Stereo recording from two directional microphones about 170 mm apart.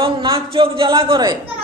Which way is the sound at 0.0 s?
30° right (ahead or behind).